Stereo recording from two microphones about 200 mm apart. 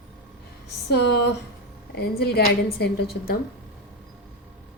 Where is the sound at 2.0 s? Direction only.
50° left (ahead or behind).